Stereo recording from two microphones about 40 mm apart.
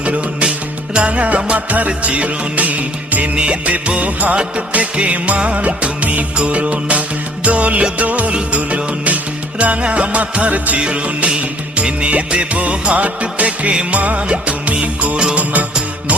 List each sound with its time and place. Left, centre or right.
0.0 s music: right
3.3 s music: right